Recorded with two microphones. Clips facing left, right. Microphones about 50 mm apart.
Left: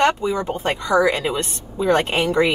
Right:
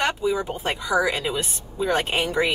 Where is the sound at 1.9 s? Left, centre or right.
Centre.